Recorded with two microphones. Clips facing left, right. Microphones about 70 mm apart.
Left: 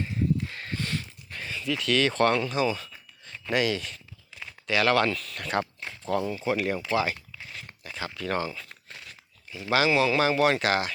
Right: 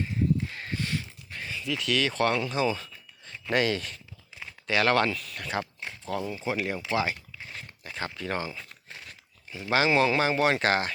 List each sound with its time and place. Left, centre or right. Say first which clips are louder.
0.5 s a sound: even; centre
1.8 s speech: left 3 dB; centre
2.5 s speech: left 1 dB; right
3.5 s speech: even; right
5.0 s speech: left 2 dB; centre
6.3 s speech: left 3 dB; centre
6.9 s a sound: right 1 dB; right
8.1 s speech: left 5 dB; centre